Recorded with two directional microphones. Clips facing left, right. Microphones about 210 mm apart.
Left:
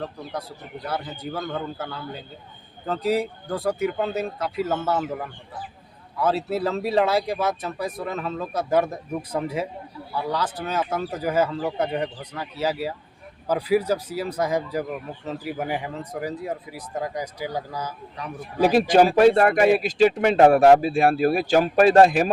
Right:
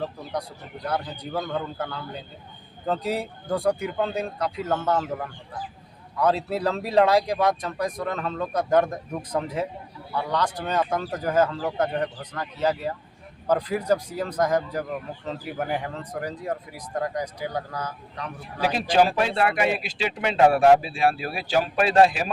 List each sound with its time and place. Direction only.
0.0 s speech: centre (ahead or behind)
6.1 s speech: 5° left (ahead or behind)
18.7 s speech: 50° left (ahead or behind)